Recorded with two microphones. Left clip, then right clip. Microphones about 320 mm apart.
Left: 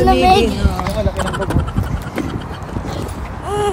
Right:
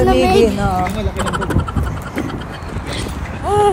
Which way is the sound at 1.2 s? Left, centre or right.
Centre.